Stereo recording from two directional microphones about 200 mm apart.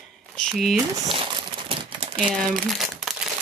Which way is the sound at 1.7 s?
25° right (ahead or behind).